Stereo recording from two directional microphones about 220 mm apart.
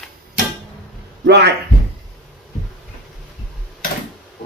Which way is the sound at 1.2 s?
50° right (ahead or behind).